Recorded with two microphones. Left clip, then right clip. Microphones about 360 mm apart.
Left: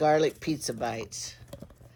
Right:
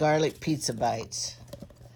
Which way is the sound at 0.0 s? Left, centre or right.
Right.